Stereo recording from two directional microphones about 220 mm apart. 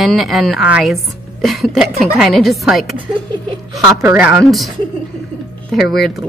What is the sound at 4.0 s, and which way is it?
Speech, 5° right (ahead or behind).